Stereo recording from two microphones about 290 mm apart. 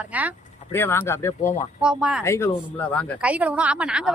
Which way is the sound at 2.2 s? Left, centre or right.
Centre.